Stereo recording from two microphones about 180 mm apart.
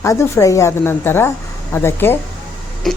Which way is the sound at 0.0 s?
15° left (ahead or behind).